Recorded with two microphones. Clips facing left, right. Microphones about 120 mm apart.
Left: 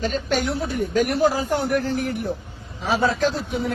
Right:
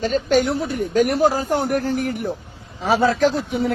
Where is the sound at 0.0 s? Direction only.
40° right (ahead or behind).